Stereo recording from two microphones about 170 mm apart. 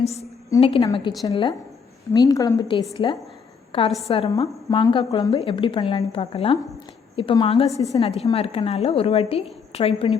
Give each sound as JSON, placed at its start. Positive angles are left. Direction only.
{"t": 0.6, "sound": "a woman's voice", "side_deg": 35}
{"t": 7.7, "sound": "a woman's voice", "side_deg": -20}
{"t": 7.9, "sound": "a woman's voice", "side_deg": 35}